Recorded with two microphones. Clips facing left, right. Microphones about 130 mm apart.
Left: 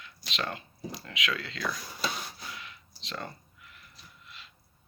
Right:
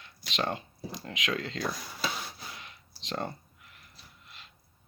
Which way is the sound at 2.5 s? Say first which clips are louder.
Left 2 dB; 40° right (ahead or behind).